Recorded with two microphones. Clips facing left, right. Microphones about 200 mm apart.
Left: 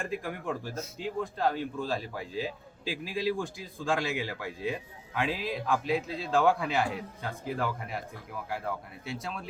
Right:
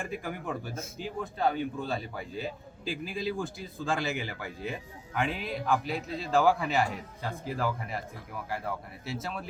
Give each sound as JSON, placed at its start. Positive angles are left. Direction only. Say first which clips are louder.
{"t": 0.0, "sound": "speech", "louder": "left 1 dB", "side_deg": 0}